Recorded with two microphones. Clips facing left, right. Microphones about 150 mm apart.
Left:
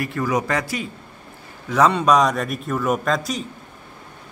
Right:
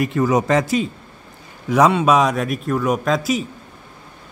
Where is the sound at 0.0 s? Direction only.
20° right (ahead or behind).